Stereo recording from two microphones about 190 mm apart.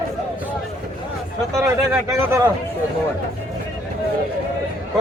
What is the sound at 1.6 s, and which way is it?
Speech, 15° right (ahead or behind).